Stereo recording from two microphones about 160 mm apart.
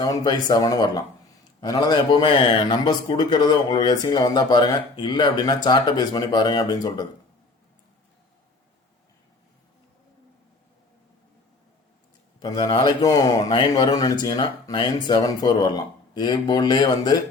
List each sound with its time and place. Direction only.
0.0 s speech: 25° left (ahead or behind)
12.4 s speech: 25° left (ahead or behind)